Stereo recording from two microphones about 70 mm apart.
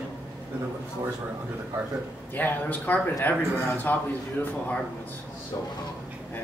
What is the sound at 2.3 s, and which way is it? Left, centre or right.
Speech, left.